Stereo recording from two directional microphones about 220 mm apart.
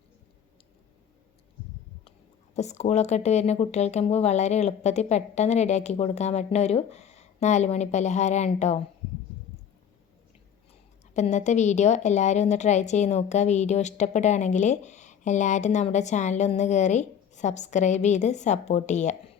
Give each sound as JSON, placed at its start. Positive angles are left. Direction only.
{"t": 2.6, "sound": "a woman's voice", "side_deg": 30}
{"t": 11.1, "sound": "a woman's voice", "side_deg": 30}